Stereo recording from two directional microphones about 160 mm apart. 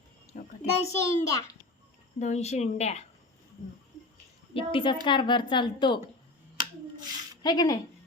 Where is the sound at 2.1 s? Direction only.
45° left (ahead or behind).